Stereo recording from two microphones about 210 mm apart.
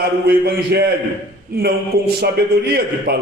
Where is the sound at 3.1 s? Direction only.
50° right (ahead or behind).